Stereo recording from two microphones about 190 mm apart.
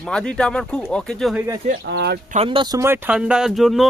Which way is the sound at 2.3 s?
30° right (ahead or behind).